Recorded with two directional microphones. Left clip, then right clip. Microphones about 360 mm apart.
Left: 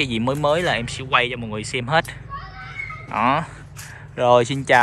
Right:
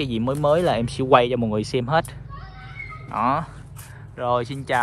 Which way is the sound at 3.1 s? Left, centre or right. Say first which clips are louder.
Left 2 dB; centre.